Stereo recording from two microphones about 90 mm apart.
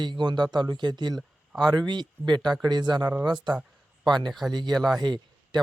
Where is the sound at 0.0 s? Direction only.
60° right (ahead or behind).